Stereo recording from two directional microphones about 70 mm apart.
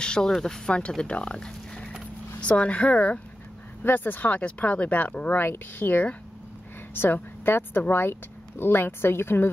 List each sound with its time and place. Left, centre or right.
0.0 s speech: centre; by 9.5 s left